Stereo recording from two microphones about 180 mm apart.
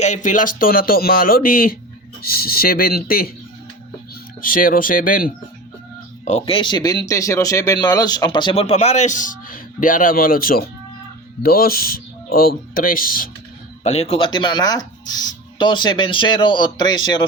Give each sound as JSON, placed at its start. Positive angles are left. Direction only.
{"t": 0.0, "sound": "speech", "side_deg": 45}
{"t": 4.4, "sound": "speech", "side_deg": 50}
{"t": 6.2, "sound": "speech", "side_deg": 35}
{"t": 13.8, "sound": "speech", "side_deg": 35}